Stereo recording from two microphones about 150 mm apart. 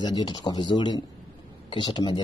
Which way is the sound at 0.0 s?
30° left (ahead or behind).